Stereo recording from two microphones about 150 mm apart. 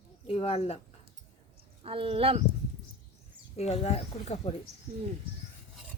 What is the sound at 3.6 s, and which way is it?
Speech, 45° left (ahead or behind).